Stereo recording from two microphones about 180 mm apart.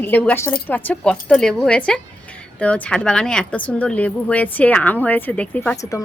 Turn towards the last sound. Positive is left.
turn(degrees=10)  # may be behind; listen again after turning